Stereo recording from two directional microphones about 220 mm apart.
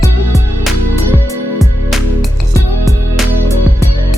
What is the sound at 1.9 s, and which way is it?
Music, centre (ahead or behind).